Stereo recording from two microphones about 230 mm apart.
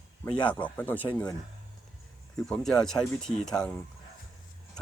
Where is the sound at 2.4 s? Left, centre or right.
Centre.